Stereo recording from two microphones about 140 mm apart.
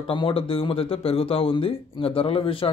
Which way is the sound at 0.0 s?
40° left (ahead or behind).